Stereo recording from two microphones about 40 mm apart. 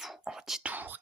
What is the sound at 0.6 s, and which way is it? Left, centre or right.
Speech, right.